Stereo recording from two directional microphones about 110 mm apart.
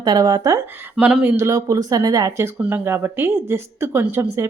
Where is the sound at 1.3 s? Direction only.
30° right (ahead or behind).